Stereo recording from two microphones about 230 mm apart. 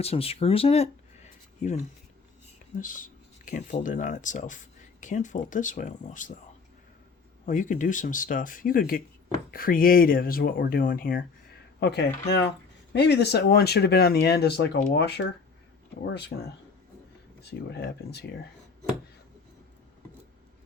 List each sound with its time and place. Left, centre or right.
0.0 s speech: left
2.8 s speech: left
7.4 s speech: left